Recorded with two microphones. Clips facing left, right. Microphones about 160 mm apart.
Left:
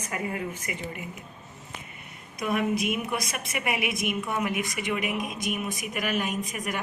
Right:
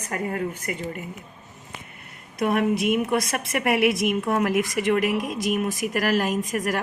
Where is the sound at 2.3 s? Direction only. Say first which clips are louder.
Right 5 dB; 65° right (ahead or behind).